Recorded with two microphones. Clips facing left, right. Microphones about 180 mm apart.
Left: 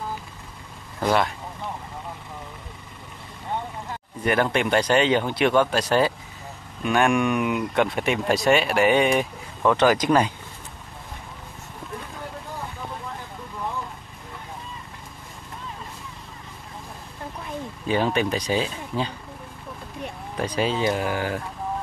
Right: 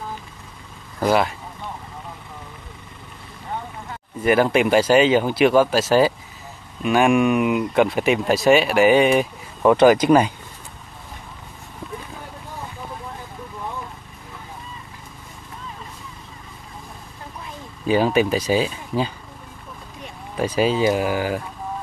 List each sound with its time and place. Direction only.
1.0 s speech: 5° right (ahead or behind)
4.2 s speech: 5° right (ahead or behind)
17.8 s speech: 10° right (ahead or behind)
20.3 s speech: 10° right (ahead or behind)